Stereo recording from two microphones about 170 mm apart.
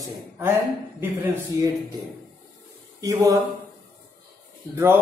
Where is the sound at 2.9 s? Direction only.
20° right (ahead or behind).